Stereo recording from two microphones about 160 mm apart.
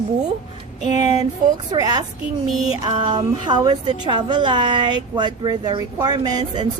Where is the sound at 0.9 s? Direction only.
25° right (ahead or behind).